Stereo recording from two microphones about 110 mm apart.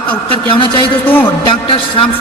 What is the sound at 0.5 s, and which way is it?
Speech, 45° left (ahead or behind).